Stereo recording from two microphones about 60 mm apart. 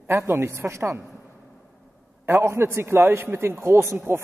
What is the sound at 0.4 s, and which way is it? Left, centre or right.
Speech, right.